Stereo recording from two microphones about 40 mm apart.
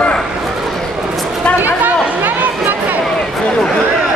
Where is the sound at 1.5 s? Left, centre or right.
Right.